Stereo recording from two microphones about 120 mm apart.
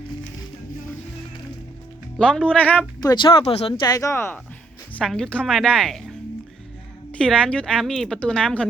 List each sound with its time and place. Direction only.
2.1 s a woman's voice: 5° left (ahead or behind)
3.0 s speech: 30° left (ahead or behind)
3.2 s speech: 50° left (ahead or behind)
3.8 s speech: 30° left (ahead or behind)
4.9 s a woman's voice: 5° left (ahead or behind)